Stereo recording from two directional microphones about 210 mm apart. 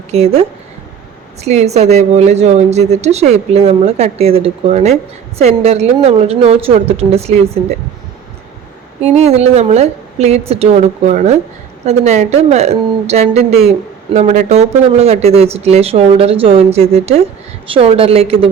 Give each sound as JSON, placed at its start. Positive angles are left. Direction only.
{"t": 0.1, "sound": "a woman's voice", "side_deg": -30}
{"t": 1.5, "sound": "a woman's voice", "side_deg": -30}
{"t": 9.0, "sound": "a woman's voice", "side_deg": -30}